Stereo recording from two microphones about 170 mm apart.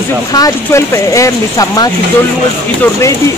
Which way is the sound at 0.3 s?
20° left (ahead or behind).